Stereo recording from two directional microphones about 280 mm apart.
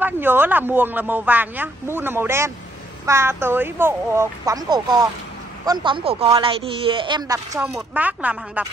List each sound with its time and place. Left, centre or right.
0.0 s speech: centre